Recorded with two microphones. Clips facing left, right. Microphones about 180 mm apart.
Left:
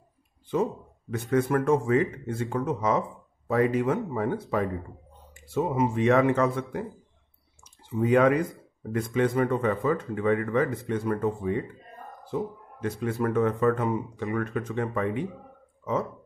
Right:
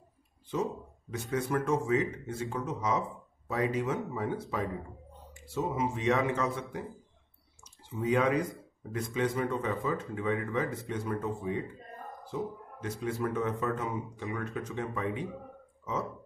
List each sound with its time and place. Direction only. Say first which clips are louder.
1.1 s speech: left 7 dB; 55° left (ahead or behind)
8.0 s speech: left 6 dB; 60° left (ahead or behind)